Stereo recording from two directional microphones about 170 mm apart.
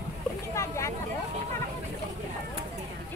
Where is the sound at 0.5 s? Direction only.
15° left (ahead or behind).